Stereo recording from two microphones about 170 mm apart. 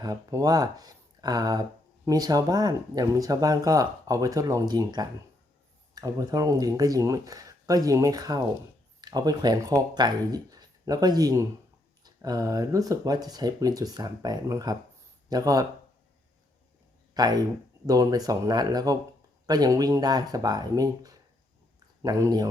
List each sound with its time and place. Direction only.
0.0 s speech: 20° right (ahead or behind)
17.2 s speech: 25° right (ahead or behind)